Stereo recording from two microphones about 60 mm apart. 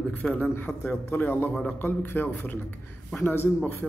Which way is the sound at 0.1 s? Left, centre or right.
Left.